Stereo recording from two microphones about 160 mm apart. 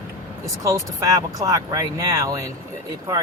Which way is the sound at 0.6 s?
20° right (ahead or behind).